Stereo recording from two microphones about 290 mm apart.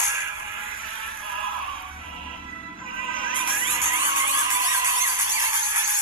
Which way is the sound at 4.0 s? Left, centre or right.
Centre.